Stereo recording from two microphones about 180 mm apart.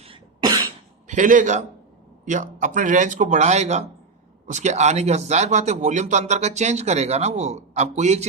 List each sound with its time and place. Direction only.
0.0 s cough: 30° right (ahead or behind)
1.0 s a man's voice: 45° right (ahead or behind)